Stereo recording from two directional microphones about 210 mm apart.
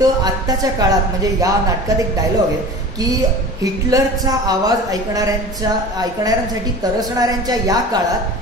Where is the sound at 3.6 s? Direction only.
15° right (ahead or behind).